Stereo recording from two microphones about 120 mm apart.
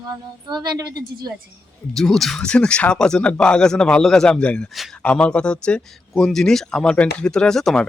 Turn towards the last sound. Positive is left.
turn(degrees=5)  # may be behind; listen again after turning